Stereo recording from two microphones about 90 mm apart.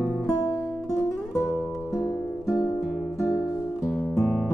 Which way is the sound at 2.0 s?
40° left (ahead or behind).